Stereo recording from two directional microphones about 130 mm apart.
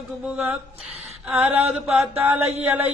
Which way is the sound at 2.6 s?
15° right (ahead or behind).